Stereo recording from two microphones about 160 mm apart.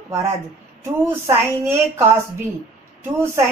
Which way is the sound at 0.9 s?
15° right (ahead or behind).